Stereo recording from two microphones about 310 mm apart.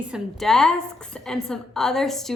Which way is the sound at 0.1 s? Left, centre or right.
Centre.